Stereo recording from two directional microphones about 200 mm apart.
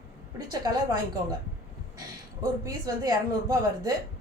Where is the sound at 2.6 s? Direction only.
20° right (ahead or behind).